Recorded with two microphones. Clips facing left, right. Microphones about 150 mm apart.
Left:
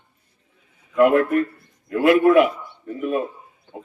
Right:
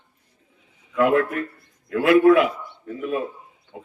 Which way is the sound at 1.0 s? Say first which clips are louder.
Left 4 dB; 20° left (ahead or behind).